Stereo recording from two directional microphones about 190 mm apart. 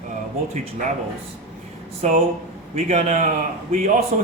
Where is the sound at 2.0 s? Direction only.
35° right (ahead or behind).